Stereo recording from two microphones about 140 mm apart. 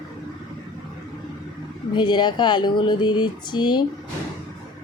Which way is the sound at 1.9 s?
30° left (ahead or behind).